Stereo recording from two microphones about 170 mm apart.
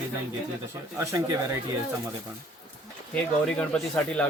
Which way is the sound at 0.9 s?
20° right (ahead or behind).